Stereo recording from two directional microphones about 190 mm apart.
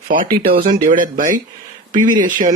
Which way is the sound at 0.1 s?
50° right (ahead or behind).